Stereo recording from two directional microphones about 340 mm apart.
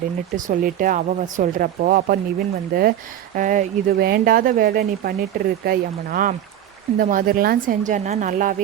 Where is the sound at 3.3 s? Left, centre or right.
Right.